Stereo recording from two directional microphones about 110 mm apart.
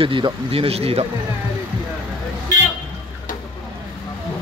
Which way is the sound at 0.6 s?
65° right (ahead or behind).